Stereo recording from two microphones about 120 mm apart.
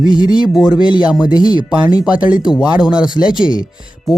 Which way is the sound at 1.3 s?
35° left (ahead or behind).